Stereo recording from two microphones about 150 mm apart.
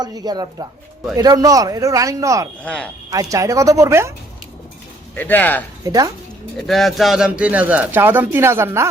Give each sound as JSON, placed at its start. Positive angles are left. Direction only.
{"t": 0.0, "sound": "a man's voice", "side_deg": -25}
{"t": 2.6, "sound": "speech", "side_deg": 10}
{"t": 3.1, "sound": "a man's voice", "side_deg": -25}
{"t": 5.1, "sound": "speech", "side_deg": 10}
{"t": 5.8, "sound": "speech", "side_deg": -25}
{"t": 6.6, "sound": "speech", "side_deg": 0}